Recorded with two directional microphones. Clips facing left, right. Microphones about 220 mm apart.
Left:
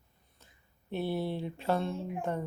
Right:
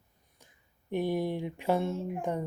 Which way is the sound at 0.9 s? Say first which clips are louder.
Right 3 dB; 15° right (ahead or behind).